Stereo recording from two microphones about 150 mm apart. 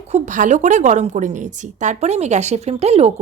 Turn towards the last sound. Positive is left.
turn(degrees=-45)  # may be behind; listen again after turning